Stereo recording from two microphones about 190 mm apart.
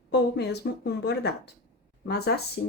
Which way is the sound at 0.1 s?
60° left (ahead or behind).